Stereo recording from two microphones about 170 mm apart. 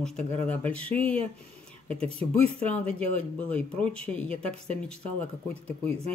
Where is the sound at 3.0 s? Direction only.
5° left (ahead or behind).